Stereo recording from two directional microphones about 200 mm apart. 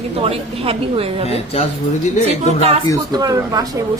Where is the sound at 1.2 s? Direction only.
30° left (ahead or behind).